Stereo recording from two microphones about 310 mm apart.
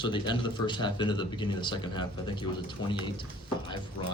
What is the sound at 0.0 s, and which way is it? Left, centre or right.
Speech, centre.